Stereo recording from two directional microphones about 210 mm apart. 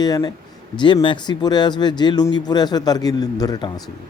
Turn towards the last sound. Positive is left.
turn(degrees=20)  # may be behind; listen again after turning